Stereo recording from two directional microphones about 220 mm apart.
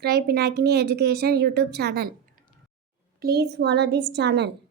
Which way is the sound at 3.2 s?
45° right (ahead or behind).